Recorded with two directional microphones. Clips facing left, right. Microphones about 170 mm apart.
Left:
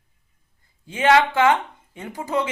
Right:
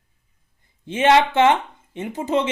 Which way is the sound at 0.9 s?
25° right (ahead or behind).